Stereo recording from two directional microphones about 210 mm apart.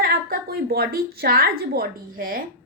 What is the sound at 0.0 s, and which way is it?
A woman's voice, 45° right (ahead or behind).